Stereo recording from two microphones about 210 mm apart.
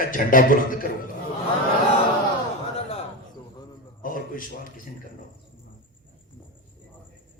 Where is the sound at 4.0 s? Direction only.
40° left (ahead or behind).